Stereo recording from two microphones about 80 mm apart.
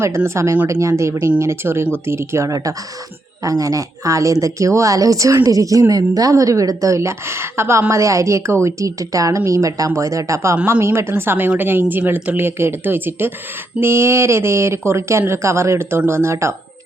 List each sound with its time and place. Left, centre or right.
0.0 s a woman's voice: right